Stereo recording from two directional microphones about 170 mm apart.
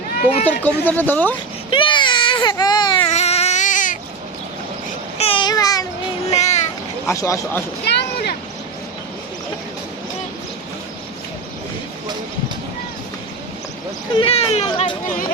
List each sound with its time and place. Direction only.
0.2 s speech: 10° left (ahead or behind)
1.7 s baby cry: 30° left (ahead or behind); by 3.9 s 50° left (ahead or behind)
5.1 s babbling: 35° left (ahead or behind)
6.3 s a sound: 40° left (ahead or behind)
7.1 s speech: 15° left (ahead or behind)
7.9 s a sound: 70° left (ahead or behind)
14.2 s speech: 35° left (ahead or behind)